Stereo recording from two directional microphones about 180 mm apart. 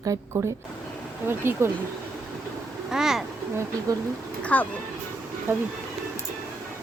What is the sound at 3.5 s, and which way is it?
Speech, 15° right (ahead or behind).